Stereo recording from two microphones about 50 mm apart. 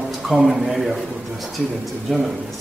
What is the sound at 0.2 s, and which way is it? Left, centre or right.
A man's voice, centre.